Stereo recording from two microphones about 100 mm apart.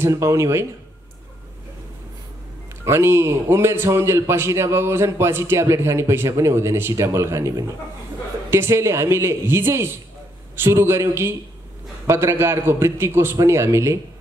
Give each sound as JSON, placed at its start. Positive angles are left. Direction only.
{"t": 0.0, "sound": "a man's voice", "side_deg": -30}
{"t": 2.8, "sound": "a man's voice", "side_deg": -25}